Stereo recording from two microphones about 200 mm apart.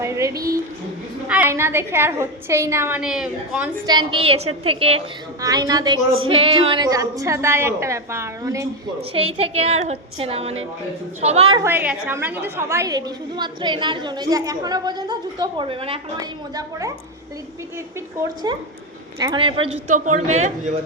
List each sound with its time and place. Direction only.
0.0 s a woman's voice: 15° right (ahead or behind)
3.8 s a woman's voice: 25° right (ahead or behind)
5.4 s a woman's voice: 20° right (ahead or behind)
9.1 s a woman's voice: 30° right (ahead or behind)
11.5 s a woman's voice: 10° right (ahead or behind)
18.5 s a woman's voice: 20° right (ahead or behind); by 20.7 s 35° right (ahead or behind)